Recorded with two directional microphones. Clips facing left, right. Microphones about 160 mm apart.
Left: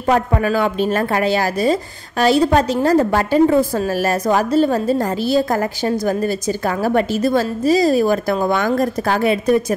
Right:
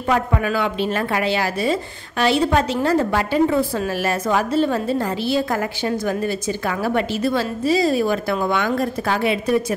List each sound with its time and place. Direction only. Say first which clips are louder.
0.1 s speech: left 4 dB; 40° left (ahead or behind)